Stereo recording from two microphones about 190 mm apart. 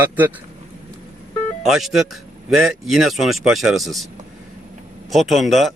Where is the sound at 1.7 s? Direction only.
Centre (ahead or behind).